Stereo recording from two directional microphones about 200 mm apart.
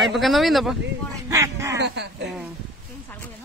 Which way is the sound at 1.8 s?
60° right (ahead or behind).